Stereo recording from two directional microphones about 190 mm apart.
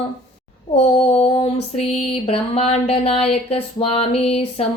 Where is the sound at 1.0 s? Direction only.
35° left (ahead or behind).